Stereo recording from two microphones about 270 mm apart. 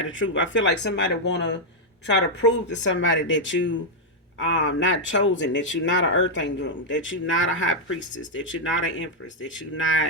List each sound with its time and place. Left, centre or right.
0.0 s speech: left